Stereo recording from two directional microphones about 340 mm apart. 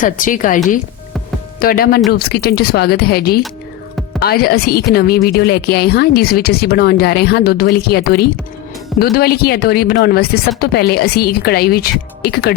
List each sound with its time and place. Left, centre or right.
0.0 s a woman's voice: left